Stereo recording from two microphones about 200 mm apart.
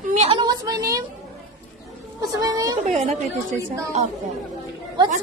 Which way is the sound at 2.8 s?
30° right (ahead or behind).